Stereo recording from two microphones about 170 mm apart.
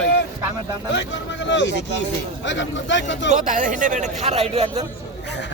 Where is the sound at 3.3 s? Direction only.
50° right (ahead or behind).